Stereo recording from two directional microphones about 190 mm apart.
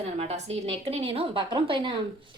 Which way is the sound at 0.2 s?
35° right (ahead or behind).